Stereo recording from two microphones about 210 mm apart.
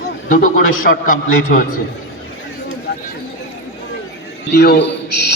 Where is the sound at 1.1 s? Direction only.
45° left (ahead or behind).